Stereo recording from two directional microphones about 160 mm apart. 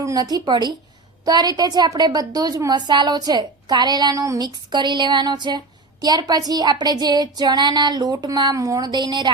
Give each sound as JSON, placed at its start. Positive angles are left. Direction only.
{"t": 0.0, "sound": "a woman's voice", "side_deg": -20}